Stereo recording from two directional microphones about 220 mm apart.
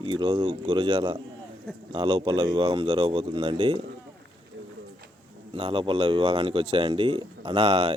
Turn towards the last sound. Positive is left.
turn(degrees=-20)  # may be behind; listen again after turning